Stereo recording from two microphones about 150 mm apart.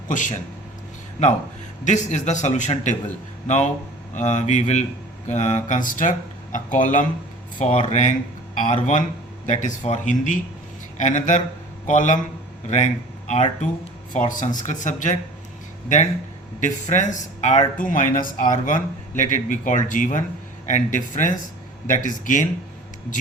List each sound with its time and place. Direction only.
0.1 s speech: 60° left (ahead or behind)
1.8 s a man's voice: 55° left (ahead or behind)
7.6 s a man's voice: 50° left (ahead or behind)
16.6 s speech: 55° left (ahead or behind)